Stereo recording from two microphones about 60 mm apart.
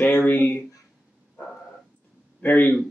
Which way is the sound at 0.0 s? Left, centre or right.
Left.